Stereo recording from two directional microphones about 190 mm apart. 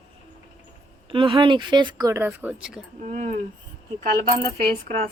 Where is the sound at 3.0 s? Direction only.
40° right (ahead or behind).